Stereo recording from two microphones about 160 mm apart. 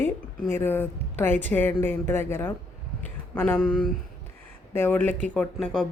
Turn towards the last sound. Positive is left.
turn(degrees=5)  # may be behind; listen again after turning